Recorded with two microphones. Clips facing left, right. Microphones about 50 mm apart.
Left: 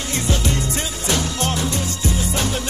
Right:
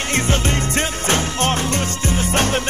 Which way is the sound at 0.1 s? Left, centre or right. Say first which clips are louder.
Right 2 dB; right.